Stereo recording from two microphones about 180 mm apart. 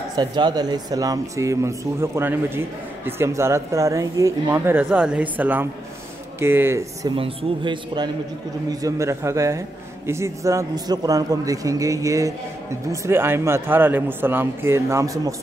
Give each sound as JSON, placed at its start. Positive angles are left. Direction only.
{"t": 0.1, "sound": "speech", "side_deg": -25}
{"t": 7.2, "sound": "speech", "side_deg": -30}